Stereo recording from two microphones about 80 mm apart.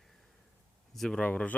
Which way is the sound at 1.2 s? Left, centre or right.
Centre.